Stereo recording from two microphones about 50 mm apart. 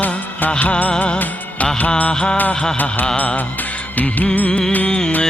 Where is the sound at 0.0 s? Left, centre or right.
Left.